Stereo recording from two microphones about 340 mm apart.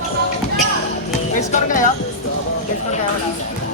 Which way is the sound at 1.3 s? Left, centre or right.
Left.